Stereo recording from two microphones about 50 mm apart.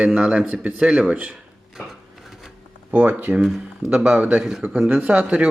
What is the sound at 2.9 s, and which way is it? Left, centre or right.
Speech, right.